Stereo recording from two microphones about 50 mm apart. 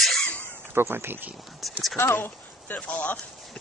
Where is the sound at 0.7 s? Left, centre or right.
Right.